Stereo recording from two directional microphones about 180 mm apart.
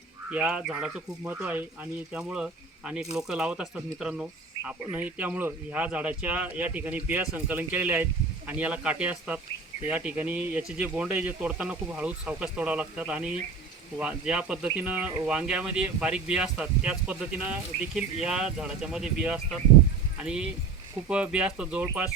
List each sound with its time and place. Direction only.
0.3 s speech: 5° right (ahead or behind)